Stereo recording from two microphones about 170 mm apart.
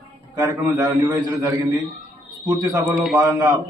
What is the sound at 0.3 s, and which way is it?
Speech, 20° right (ahead or behind).